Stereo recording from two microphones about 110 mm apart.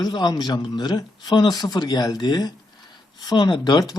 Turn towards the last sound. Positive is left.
turn(degrees=40)  # may be behind; listen again after turning